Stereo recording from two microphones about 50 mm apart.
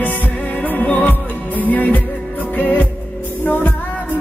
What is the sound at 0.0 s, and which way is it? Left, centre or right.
Music, left.